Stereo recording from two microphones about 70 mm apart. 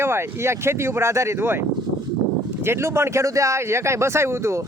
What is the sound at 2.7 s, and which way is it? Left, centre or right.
Speech, right.